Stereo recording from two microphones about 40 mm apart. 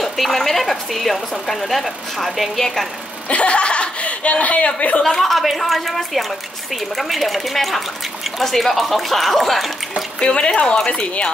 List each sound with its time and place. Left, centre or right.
0.0 s speech: centre
3.3 s speech: left
5.0 s speech: centre
10.2 s speech: left